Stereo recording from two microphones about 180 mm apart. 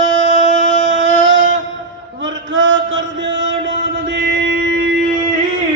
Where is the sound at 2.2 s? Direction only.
90° right; by 4.8 s 70° right (ahead or behind).